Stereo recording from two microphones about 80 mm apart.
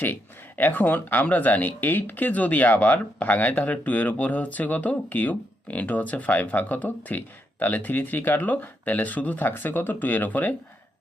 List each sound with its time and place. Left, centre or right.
0.0 s speech: left